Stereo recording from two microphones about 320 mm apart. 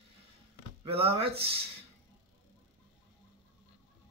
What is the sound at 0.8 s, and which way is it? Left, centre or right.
Speech, centre.